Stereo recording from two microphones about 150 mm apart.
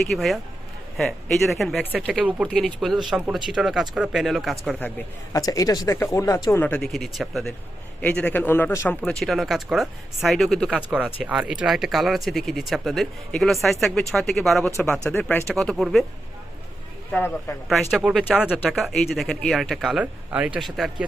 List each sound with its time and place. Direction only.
0.0 s speech: centre (ahead or behind)
2.5 s speech: 5° left (ahead or behind)
5.3 s speech: 25° left (ahead or behind)
9.0 s speech: 5° left (ahead or behind)
17.1 s speech: 15° left (ahead or behind)
17.7 s speech: centre (ahead or behind)